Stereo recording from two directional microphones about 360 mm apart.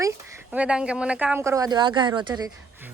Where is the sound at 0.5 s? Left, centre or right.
Centre.